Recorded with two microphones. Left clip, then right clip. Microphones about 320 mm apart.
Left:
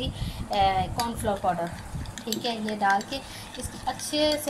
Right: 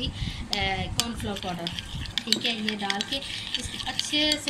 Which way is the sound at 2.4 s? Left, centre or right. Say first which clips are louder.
Left 2 dB; centre.